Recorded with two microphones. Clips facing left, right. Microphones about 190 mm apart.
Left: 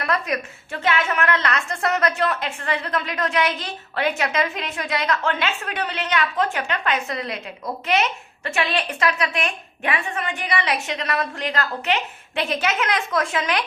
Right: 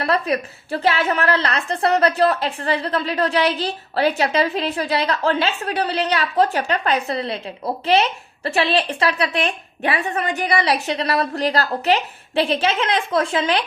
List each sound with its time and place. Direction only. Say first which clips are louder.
0.0 s a woman's voice: right 4 dB; 35° right (ahead or behind)